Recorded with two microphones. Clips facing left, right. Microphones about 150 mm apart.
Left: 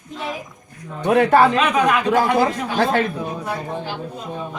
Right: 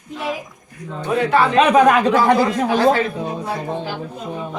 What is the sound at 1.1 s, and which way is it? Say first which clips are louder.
Speech: left 4 dB; 65° left (ahead or behind).